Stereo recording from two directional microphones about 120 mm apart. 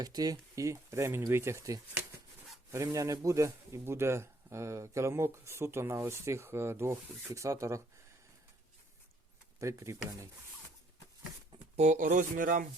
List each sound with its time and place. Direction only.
0.0 s speech: 30° right (ahead or behind)
9.6 s speech: 25° right (ahead or behind)
11.8 s speech: 85° right